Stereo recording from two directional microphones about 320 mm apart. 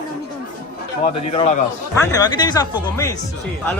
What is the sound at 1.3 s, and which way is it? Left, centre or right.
A man's voice, left.